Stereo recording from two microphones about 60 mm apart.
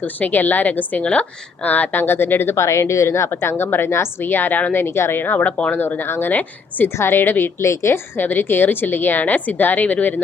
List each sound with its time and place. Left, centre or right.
0.0 s a woman's voice: left
2.6 s a woman's voice: left
4.7 s a woman's voice: left
5.7 s a woman's voice: left